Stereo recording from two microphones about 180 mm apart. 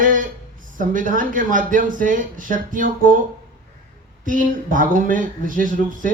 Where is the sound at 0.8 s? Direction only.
50° right (ahead or behind).